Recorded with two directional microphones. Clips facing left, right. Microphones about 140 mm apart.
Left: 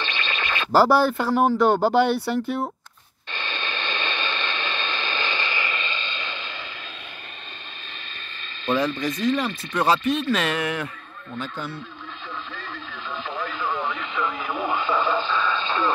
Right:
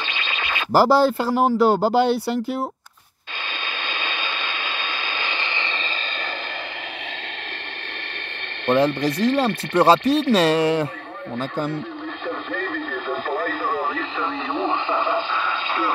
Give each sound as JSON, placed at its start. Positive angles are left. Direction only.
{"t": 0.0, "sound": "speech", "side_deg": -15}
{"t": 3.6, "sound": "radio", "side_deg": -10}
{"t": 8.6, "sound": "speech", "side_deg": -65}
{"t": 9.8, "sound": "speech", "side_deg": -35}
{"t": 11.3, "sound": "speech", "side_deg": -45}
{"t": 12.5, "sound": "radio", "side_deg": -55}